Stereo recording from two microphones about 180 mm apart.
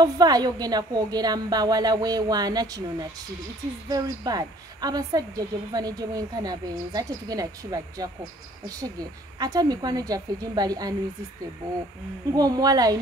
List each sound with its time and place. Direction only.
0.0 s a woman's voice: 20° right (ahead or behind)
12.3 s a woman's voice: 20° right (ahead or behind)